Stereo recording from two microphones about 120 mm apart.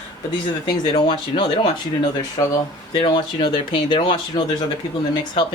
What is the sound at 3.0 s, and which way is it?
Speech, 40° left (ahead or behind).